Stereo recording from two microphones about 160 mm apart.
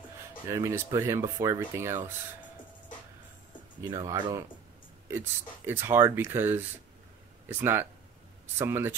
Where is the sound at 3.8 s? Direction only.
25° right (ahead or behind).